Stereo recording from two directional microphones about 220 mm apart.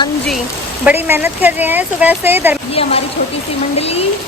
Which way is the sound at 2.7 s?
25° left (ahead or behind).